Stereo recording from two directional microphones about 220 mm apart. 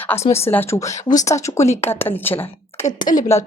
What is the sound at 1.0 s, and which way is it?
Speech, 35° left (ahead or behind).